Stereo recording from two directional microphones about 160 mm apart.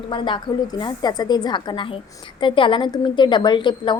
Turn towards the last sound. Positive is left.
turn(degrees=30)  # may be behind; listen again after turning